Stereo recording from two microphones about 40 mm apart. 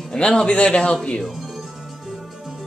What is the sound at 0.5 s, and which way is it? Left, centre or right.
Speech, left.